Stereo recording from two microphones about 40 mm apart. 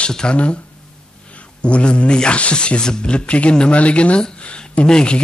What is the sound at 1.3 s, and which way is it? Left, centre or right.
Speech, left.